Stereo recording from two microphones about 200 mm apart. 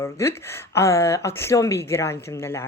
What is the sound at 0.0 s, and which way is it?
Speech, 15° left (ahead or behind).